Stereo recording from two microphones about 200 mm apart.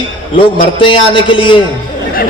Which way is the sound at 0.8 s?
25° left (ahead or behind).